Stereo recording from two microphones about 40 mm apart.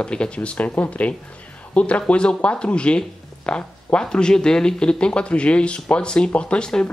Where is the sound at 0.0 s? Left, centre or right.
Left.